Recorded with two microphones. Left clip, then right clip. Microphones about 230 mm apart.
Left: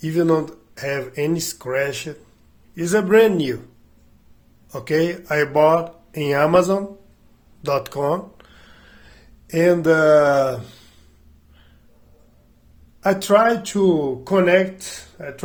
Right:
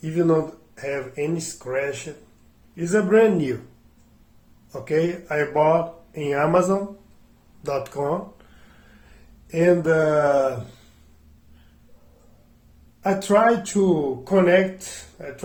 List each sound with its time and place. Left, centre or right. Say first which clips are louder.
0.0 s speech: left 2 dB; left
4.7 s speech: left 2 dB; left
9.5 s speech: left 3 dB; left
13.0 s speech: left 3 dB; left